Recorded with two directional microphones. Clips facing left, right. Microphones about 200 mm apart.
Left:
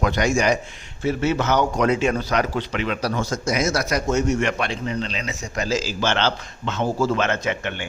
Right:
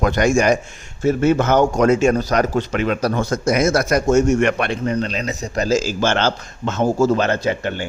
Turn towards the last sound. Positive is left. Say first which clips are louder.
# right 5 dB
turn(degrees=-40)  # may be behind; listen again after turning